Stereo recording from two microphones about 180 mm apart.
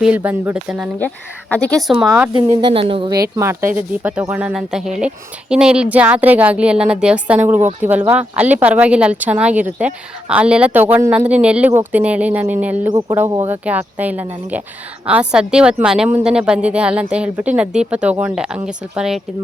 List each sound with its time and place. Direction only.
0.0 s speech: 10° right (ahead or behind)
0.9 s a woman's voice: 10° left (ahead or behind)
2.3 s speech: 25° right (ahead or behind); by 12.9 s 10° right (ahead or behind)
12.9 s a woman's voice: 20° right (ahead or behind); by 19.2 s 5° right (ahead or behind)